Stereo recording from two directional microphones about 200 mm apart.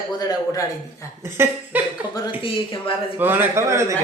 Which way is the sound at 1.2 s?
10° right (ahead or behind).